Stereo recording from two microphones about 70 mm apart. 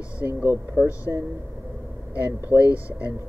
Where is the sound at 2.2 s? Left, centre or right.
Right.